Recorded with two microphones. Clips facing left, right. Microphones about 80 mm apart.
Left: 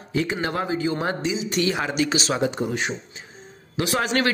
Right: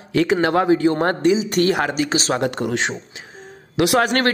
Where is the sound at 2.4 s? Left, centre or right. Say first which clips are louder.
Right 3 dB; right.